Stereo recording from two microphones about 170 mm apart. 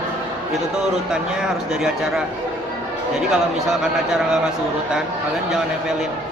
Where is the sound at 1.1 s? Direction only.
5° right (ahead or behind).